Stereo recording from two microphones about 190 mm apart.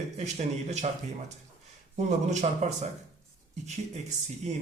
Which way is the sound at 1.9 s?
40° right (ahead or behind).